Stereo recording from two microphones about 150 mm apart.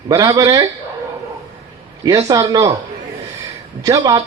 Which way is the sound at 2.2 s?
25° right (ahead or behind).